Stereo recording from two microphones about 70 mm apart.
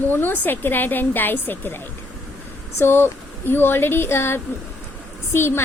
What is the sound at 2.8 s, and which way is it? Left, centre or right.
Speech, left.